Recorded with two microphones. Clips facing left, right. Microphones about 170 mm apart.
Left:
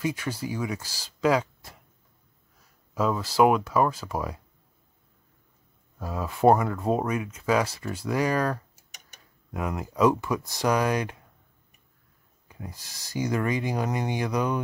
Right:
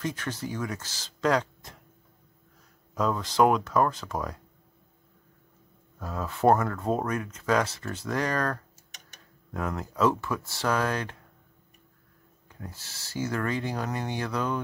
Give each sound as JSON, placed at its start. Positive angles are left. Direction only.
{"t": 0.0, "sound": "speech", "side_deg": 10}
{"t": 2.9, "sound": "speech", "side_deg": 5}
{"t": 5.9, "sound": "speech", "side_deg": 10}
{"t": 12.4, "sound": "speech", "side_deg": 10}